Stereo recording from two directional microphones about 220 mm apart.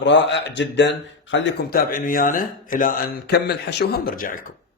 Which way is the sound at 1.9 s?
40° left (ahead or behind).